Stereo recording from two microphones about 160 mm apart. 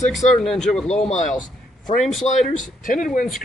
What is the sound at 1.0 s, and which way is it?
Speech, 45° left (ahead or behind).